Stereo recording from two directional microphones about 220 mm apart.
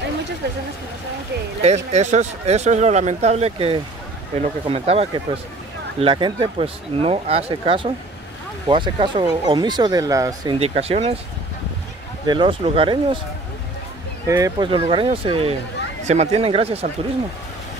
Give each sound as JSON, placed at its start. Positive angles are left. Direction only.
{"t": 1.9, "sound": "speech", "side_deg": -30}
{"t": 12.3, "sound": "speech", "side_deg": -20}
{"t": 14.2, "sound": "speech", "side_deg": -15}